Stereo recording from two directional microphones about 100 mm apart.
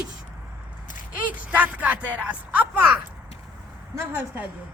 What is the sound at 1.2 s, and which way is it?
A woman's voice, 15° right (ahead or behind).